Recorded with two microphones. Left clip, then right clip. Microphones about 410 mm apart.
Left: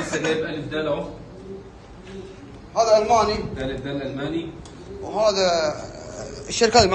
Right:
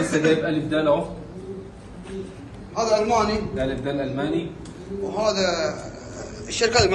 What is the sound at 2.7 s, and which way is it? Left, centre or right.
Speech, centre.